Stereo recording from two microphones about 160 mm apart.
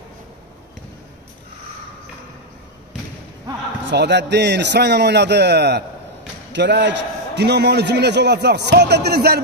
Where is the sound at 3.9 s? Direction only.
90° right.